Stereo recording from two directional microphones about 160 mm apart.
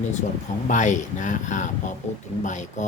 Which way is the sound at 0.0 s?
50° left (ahead or behind).